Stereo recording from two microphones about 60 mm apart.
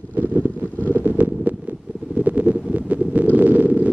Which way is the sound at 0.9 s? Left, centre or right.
Right.